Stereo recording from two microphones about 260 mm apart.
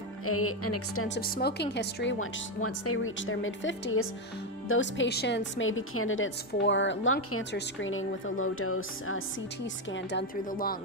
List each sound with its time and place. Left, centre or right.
0.3 s a woman's voice: left
1.0 s speech: left
5.5 s speech: left
9.9 s speech: left